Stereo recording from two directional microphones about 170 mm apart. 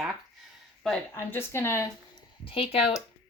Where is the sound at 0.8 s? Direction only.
10° left (ahead or behind).